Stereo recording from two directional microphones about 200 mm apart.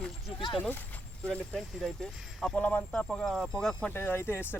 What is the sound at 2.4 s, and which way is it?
Speech, 5° left (ahead or behind).